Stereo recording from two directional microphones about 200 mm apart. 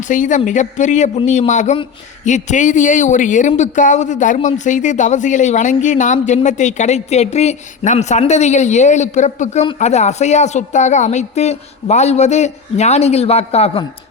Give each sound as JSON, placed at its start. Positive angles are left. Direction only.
{"t": 0.0, "sound": "speech", "side_deg": 40}